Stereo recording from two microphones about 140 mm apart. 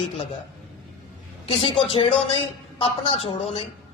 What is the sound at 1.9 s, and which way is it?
A woman's voice, 40° left (ahead or behind).